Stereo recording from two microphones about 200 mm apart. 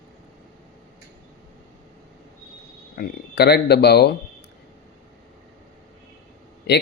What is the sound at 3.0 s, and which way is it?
Speech, 55° left (ahead or behind).